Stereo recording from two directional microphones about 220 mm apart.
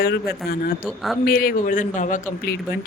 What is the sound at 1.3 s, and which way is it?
Speech, 40° left (ahead or behind).